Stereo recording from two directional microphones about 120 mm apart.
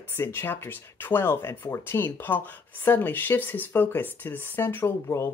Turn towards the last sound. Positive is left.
turn(degrees=20)  # may be behind; listen again after turning